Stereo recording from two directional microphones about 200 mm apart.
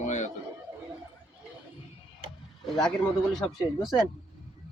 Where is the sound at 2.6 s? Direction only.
Centre (ahead or behind).